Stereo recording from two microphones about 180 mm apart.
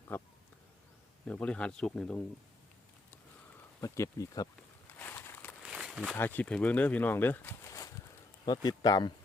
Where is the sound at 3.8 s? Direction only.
15° left (ahead or behind).